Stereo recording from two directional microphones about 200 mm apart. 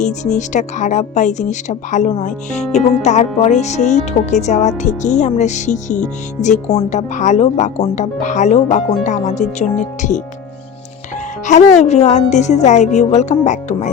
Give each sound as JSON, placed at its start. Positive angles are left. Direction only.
{"t": 0.0, "sound": "speech", "side_deg": 35}
{"t": 11.4, "sound": "speech", "side_deg": 35}